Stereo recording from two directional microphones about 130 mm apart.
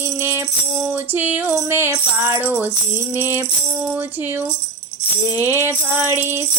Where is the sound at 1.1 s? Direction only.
15° right (ahead or behind).